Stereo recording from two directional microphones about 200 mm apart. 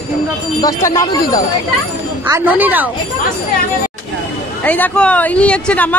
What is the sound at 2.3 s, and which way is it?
Speech, 10° right (ahead or behind).